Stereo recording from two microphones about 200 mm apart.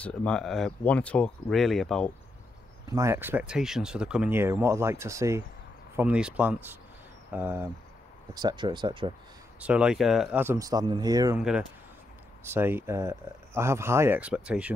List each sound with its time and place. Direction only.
0.0 s speech: 5° left (ahead or behind)
2.9 s speech: 15° right (ahead or behind)
8.4 s speech: 20° right (ahead or behind)
9.6 s speech: 5° right (ahead or behind)
11.3 s speech: 5° right (ahead or behind)